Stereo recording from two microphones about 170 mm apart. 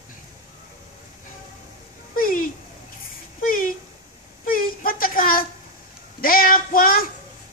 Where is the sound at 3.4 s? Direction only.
55° left (ahead or behind).